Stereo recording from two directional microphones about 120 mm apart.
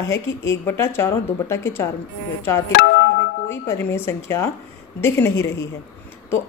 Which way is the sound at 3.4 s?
20° left (ahead or behind).